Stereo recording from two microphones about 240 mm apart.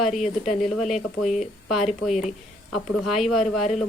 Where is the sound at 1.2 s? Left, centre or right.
Left.